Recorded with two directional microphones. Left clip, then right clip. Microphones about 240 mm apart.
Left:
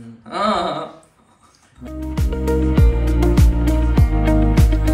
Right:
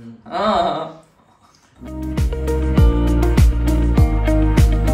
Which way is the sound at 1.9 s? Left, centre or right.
Centre.